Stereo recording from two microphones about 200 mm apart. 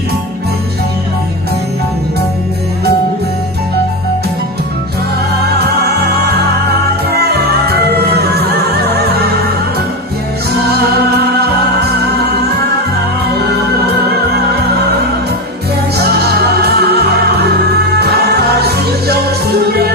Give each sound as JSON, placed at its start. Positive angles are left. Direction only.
{"t": 7.3, "sound": "music", "side_deg": -50}
{"t": 16.0, "sound": "music", "side_deg": -55}